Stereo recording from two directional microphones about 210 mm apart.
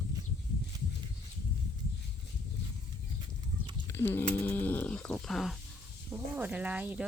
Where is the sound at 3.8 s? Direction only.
10° left (ahead or behind).